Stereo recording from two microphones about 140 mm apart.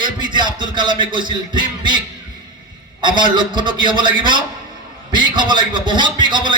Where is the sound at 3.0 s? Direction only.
35° right (ahead or behind).